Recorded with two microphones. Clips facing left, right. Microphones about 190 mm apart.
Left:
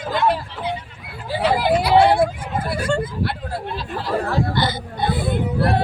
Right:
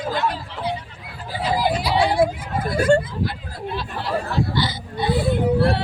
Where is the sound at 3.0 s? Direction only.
70° left (ahead or behind).